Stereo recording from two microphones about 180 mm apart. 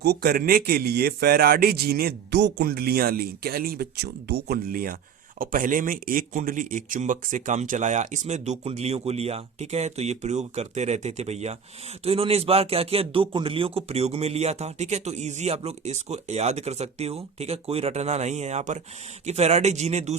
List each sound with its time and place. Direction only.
0.0 s a man's voice: 60° right (ahead or behind); by 20.1 s 40° right (ahead or behind)